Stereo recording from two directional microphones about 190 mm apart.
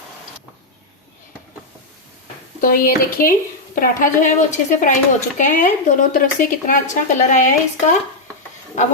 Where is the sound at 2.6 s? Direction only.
50° left (ahead or behind).